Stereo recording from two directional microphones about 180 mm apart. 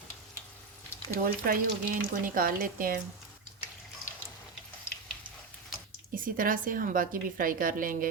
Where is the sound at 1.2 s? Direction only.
50° right (ahead or behind).